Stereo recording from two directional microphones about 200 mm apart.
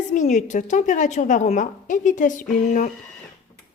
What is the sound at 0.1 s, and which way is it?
A woman's voice, 35° left (ahead or behind).